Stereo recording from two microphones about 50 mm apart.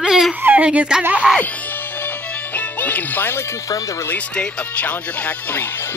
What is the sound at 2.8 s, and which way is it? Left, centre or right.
Speech, left.